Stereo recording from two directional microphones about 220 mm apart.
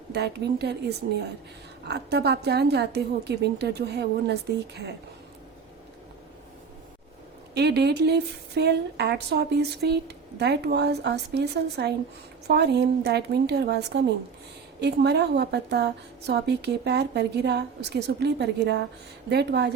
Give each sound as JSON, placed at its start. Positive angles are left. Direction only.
{"t": 0.1, "sound": "speech", "side_deg": -50}
{"t": 7.5, "sound": "speech", "side_deg": -50}